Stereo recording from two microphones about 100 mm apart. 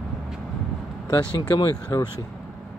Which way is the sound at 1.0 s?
45° left (ahead or behind).